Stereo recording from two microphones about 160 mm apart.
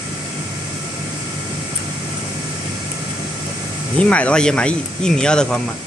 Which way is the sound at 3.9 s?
5° left (ahead or behind).